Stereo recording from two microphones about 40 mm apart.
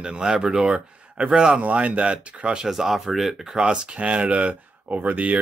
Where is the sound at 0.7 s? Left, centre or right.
Right.